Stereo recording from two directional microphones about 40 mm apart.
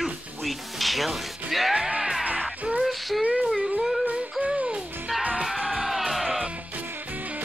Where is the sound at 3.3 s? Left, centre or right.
Centre.